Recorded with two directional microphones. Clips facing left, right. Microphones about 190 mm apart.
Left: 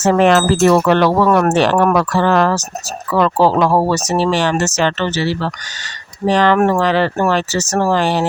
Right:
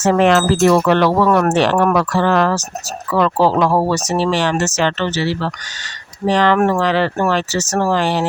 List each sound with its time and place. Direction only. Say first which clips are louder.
0.0 s speech: left 1 dB; 45° left (ahead or behind)